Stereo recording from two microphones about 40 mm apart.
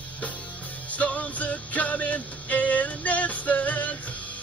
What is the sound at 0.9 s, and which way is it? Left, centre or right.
Music, left.